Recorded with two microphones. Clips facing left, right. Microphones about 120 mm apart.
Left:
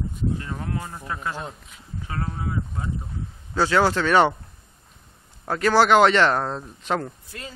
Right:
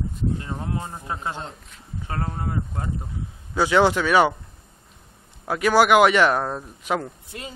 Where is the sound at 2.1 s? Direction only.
40° right (ahead or behind).